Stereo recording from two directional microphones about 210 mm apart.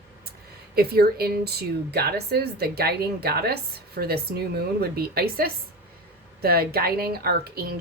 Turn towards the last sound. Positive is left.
turn(degrees=-45)  # may be behind; listen again after turning